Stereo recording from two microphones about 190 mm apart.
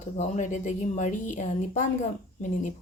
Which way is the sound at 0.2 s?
40° left (ahead or behind).